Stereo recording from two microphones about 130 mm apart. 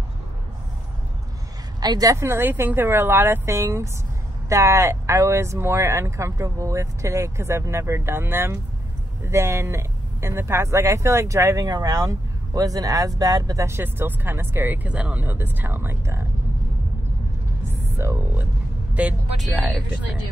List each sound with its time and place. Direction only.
1.8 s speech: 30° right (ahead or behind)
17.9 s speech: 20° right (ahead or behind)